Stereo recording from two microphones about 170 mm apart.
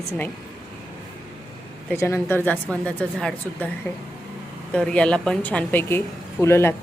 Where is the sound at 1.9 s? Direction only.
15° left (ahead or behind).